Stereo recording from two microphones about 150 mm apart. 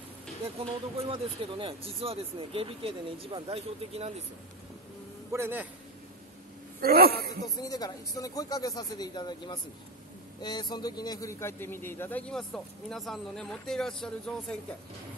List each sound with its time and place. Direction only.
0.6 s speech: 40° right (ahead or behind)
5.3 s a man's voice: 15° right (ahead or behind)
6.8 s speech: 90° right
7.4 s a man's voice: 25° left (ahead or behind); by 14.6 s 5° left (ahead or behind)